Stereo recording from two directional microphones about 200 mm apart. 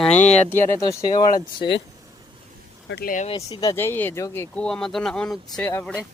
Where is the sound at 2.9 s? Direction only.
55° left (ahead or behind).